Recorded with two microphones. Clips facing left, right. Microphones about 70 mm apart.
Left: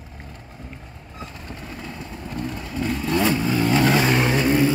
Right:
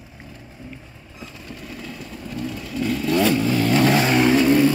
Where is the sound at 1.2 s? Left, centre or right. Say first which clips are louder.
Left 1 dB; left.